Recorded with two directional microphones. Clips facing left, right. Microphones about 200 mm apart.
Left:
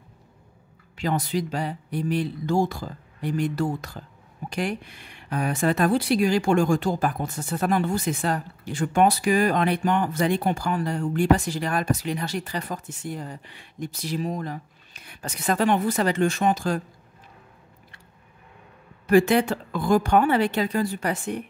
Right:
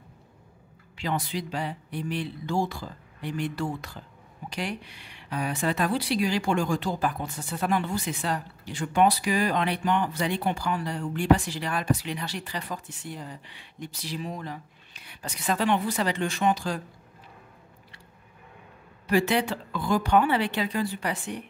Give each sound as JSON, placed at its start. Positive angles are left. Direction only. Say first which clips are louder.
{"t": 0.9, "sound": "speech", "louder": "left 5 dB", "side_deg": 45}
{"t": 19.0, "sound": "speech", "louder": "left 6 dB", "side_deg": 50}